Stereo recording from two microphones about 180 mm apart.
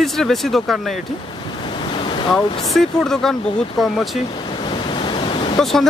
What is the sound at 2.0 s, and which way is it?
Waves, 30° left (ahead or behind).